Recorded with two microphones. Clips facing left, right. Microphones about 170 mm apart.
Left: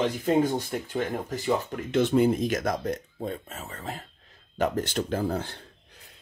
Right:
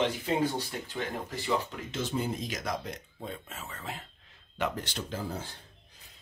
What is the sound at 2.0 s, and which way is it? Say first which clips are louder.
Speech: left 11 dB; 60° left (ahead or behind).